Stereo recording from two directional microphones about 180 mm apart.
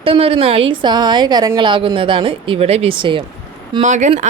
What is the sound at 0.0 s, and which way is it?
A woman's voice, 30° right (ahead or behind).